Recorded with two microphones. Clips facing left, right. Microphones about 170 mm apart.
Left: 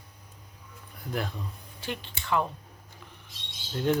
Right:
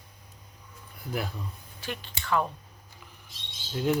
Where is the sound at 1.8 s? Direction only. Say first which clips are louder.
Left 1 dB; 25° left (ahead or behind).